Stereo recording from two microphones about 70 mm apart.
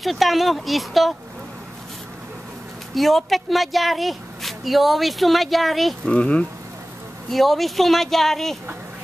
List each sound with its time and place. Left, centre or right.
0.0 s speech: centre
2.9 s speech: centre
6.0 s speech: centre
7.2 s speech: centre